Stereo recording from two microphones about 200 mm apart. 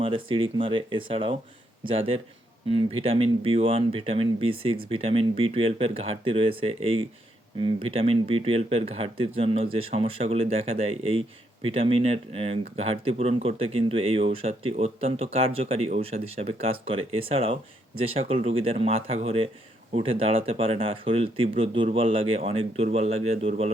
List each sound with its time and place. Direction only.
0.0 s speech: 25° right (ahead or behind)